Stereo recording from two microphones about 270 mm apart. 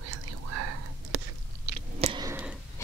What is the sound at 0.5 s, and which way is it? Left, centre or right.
Whispering, right.